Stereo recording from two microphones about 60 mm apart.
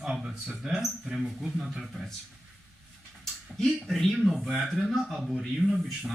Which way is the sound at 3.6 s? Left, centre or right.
Centre.